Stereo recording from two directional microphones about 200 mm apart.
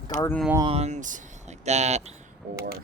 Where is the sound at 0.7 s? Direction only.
35° right (ahead or behind).